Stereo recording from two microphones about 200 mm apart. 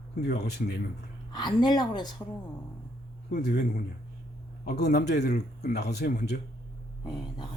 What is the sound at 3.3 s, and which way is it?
Speech, 55° left (ahead or behind).